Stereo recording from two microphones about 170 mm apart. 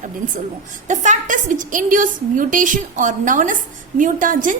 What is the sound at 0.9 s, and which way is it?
A woman's voice, 45° right (ahead or behind).